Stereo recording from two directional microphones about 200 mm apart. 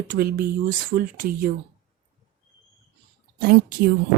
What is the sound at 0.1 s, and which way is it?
A woman's voice, 45° right (ahead or behind).